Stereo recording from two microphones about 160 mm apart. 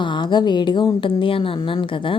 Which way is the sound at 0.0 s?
30° left (ahead or behind).